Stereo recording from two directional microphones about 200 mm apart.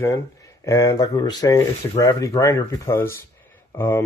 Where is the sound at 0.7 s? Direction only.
20° left (ahead or behind).